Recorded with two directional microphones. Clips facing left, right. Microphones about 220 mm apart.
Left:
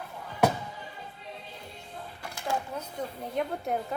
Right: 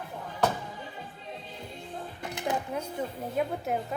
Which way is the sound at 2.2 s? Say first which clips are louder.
Right 1 dB; 20° right (ahead or behind).